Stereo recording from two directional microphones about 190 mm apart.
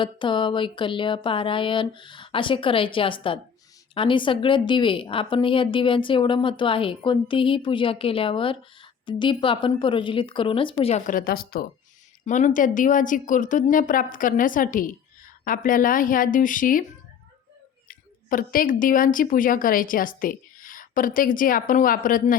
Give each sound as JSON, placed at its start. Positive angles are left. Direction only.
{"t": 0.0, "sound": "a woman's voice", "side_deg": 25}
{"t": 12.2, "sound": "a woman's voice", "side_deg": 40}
{"t": 17.8, "sound": "a woman's voice", "side_deg": 45}